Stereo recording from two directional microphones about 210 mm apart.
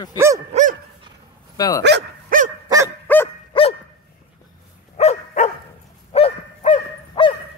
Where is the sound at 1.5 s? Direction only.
15° left (ahead or behind).